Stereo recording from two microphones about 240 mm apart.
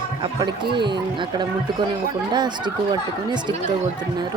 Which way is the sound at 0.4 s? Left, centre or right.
Centre.